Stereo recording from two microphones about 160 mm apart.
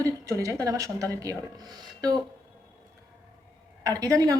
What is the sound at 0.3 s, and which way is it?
Speech, 20° right (ahead or behind).